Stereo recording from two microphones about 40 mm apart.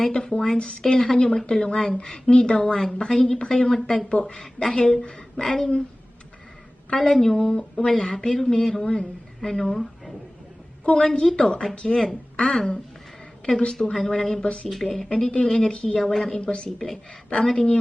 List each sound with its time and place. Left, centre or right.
0.1 s a woman's voice: left
7.0 s a woman's voice: centre
7.3 s a woman's voice: left
10.8 s a woman's voice: left
14.7 s a woman's voice: centre
15.1 s speech: left
16.0 s a woman's voice: centre
16.4 s speech: left
16.6 s a woman's voice: centre